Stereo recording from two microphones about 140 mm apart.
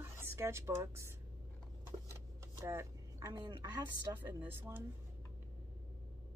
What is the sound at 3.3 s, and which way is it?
Speech, 30° right (ahead or behind).